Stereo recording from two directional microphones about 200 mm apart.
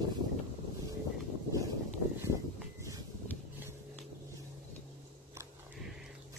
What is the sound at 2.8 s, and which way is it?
Vehicle, 15° right (ahead or behind).